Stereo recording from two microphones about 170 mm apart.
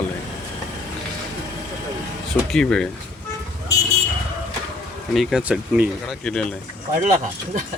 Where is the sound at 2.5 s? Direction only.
5° left (ahead or behind).